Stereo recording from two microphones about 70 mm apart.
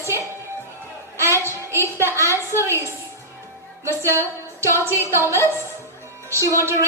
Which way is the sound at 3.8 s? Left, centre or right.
Right.